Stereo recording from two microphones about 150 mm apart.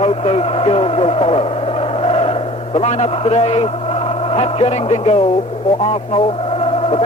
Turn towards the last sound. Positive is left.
turn(degrees=40)  # may be behind; listen again after turning